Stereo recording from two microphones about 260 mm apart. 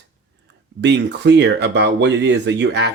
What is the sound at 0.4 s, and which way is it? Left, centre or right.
Speech, right.